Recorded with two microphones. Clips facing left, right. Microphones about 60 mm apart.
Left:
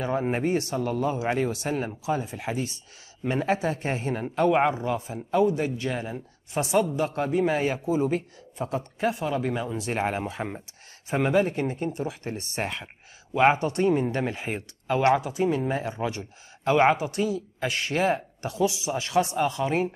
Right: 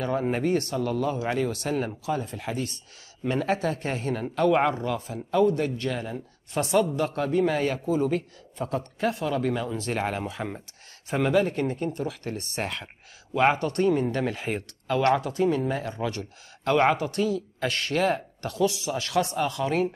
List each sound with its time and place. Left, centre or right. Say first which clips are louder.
0.0 s speech: even; centre